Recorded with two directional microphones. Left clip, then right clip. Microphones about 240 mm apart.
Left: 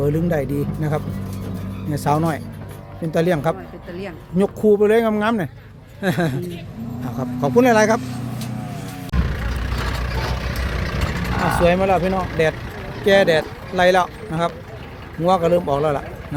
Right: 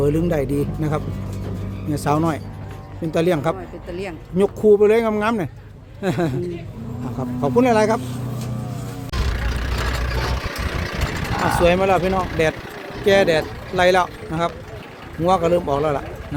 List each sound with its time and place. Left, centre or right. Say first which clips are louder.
0.0 s speech: right 1 dB; centre
9.2 s vehicle: right 1 dB; right
11.6 s speech: even; centre